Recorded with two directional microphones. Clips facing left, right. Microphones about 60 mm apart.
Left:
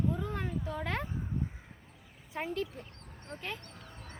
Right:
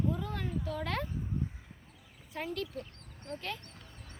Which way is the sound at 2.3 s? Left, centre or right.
Left.